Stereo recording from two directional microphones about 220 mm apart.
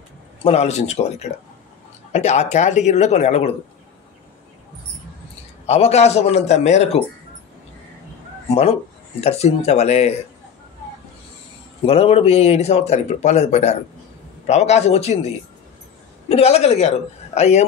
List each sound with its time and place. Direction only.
0.4 s speech: 30° left (ahead or behind)
5.7 s speech: 30° left (ahead or behind)
9.2 s speech: 30° left (ahead or behind)
11.8 s speech: 25° left (ahead or behind)